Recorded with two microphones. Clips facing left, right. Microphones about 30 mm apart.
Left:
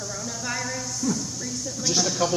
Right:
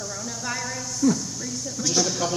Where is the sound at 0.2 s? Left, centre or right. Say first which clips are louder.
Left 1 dB; centre.